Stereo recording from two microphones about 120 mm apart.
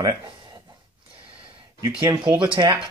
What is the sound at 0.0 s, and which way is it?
Speech, 30° right (ahead or behind).